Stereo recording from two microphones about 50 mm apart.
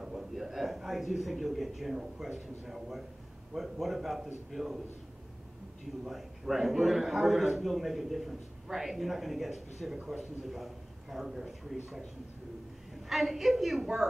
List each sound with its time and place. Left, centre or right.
0.0 s a sound: centre
2.6 s a man's voice: centre
6.0 s a man's voice: centre
13.1 s a man's voice: centre